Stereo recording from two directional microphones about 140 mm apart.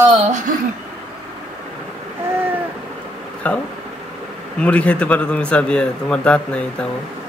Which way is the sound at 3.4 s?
10° left (ahead or behind).